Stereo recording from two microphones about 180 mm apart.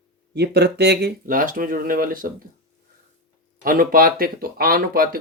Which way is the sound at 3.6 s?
50° right (ahead or behind).